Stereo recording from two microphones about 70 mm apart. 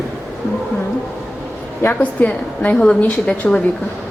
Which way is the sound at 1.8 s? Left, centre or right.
Left.